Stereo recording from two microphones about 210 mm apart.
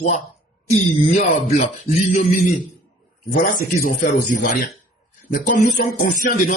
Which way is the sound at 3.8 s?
40° left (ahead or behind).